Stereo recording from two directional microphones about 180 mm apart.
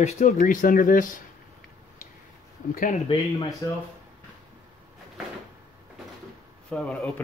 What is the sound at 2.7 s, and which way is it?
Speech, 45° left (ahead or behind).